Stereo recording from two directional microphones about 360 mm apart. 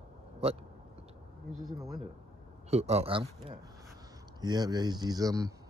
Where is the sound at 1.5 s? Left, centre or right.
Centre.